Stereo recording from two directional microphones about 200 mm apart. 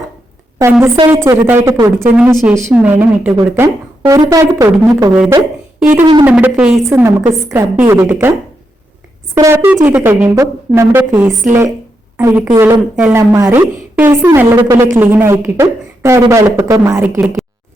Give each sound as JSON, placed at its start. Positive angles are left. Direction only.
{"t": 0.9, "sound": "speech", "side_deg": -25}
{"t": 1.2, "sound": "a woman's voice", "side_deg": -15}
{"t": 5.1, "sound": "a woman's voice", "side_deg": -5}